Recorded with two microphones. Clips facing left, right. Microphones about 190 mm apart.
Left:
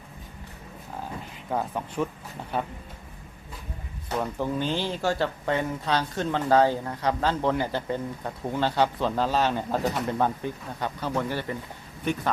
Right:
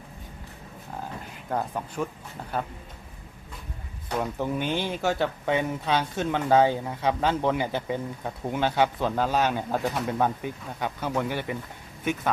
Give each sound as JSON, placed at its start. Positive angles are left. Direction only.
{"t": 1.5, "sound": "speech", "side_deg": 0}
{"t": 4.4, "sound": "speech", "side_deg": -15}